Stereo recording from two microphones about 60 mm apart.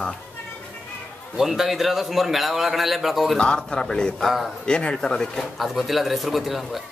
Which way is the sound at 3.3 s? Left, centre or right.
Centre.